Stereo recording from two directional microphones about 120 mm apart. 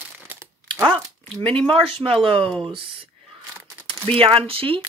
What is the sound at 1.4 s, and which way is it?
Speech, 50° right (ahead or behind).